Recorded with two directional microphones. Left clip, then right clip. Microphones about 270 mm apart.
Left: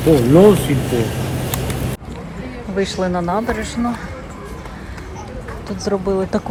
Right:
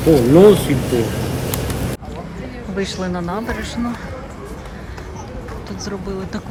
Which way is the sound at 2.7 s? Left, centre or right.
Centre.